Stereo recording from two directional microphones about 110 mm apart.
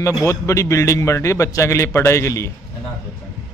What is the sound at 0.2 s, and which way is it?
A man's voice, 25° left (ahead or behind).